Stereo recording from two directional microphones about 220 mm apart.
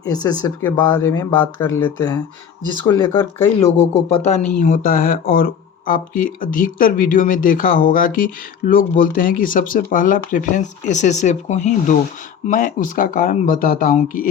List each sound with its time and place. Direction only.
0.0 s speech: 20° left (ahead or behind); by 14.3 s 40° left (ahead or behind)